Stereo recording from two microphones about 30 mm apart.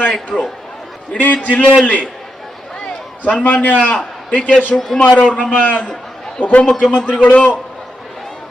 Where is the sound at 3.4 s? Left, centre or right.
Left.